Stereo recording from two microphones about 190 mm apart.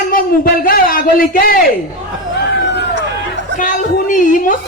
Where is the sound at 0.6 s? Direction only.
50° left (ahead or behind).